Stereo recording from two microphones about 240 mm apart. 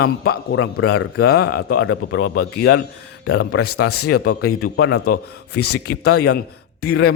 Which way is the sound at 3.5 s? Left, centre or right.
Left.